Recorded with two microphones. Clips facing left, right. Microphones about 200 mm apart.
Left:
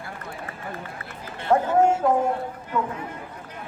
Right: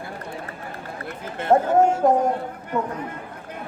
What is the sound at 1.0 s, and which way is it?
Run, 50° right (ahead or behind).